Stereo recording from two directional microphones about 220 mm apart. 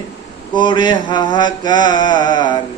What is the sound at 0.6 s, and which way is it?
Speech, 20° left (ahead or behind).